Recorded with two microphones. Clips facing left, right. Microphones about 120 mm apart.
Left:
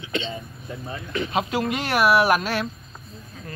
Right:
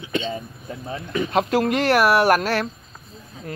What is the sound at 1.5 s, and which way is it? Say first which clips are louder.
Speech: right 6 dB; 45° right (ahead or behind).